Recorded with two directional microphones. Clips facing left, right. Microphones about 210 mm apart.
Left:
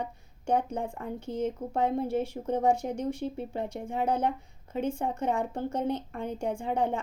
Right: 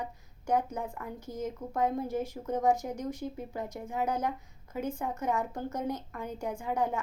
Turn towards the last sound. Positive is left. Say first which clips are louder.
# left 3 dB
turn(degrees=30)  # may be behind; listen again after turning